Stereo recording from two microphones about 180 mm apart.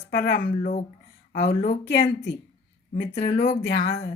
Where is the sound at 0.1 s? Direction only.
55° left (ahead or behind).